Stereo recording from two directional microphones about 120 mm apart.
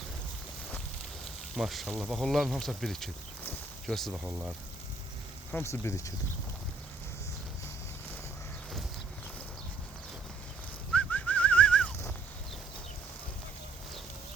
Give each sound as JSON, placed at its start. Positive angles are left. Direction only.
{"t": 1.5, "sound": "speech", "side_deg": 0}
{"t": 4.1, "sound": "speech", "side_deg": -10}
{"t": 5.5, "sound": "speech", "side_deg": 20}
{"t": 10.9, "sound": "bird", "side_deg": 10}